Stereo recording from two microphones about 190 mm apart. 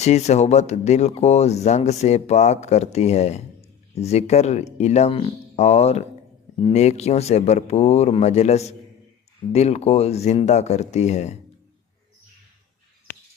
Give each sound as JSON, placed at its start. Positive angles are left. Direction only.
{"t": 0.0, "sound": "speech", "side_deg": 35}